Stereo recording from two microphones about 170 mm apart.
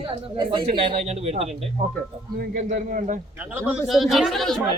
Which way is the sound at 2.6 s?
45° right (ahead or behind).